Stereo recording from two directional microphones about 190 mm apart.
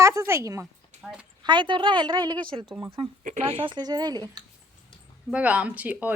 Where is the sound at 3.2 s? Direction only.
40° right (ahead or behind); by 4.4 s 20° right (ahead or behind).